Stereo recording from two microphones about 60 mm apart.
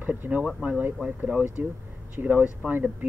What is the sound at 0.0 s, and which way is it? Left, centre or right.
Speech, right.